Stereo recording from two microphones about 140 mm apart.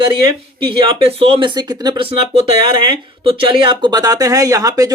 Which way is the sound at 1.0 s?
45° right (ahead or behind).